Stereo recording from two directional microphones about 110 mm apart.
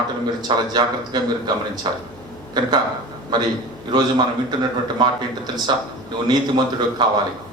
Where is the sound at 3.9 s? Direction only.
40° right (ahead or behind).